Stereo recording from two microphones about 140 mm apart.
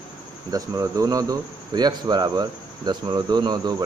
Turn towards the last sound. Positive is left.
turn(degrees=-30)  # may be behind; listen again after turning